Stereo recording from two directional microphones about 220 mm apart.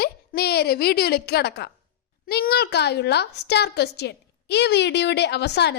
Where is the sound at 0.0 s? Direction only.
45° left (ahead or behind).